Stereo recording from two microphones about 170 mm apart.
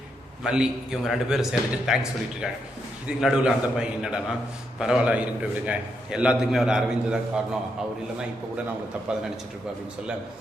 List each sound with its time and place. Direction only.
0.4 s a man's voice: 5° right (ahead or behind)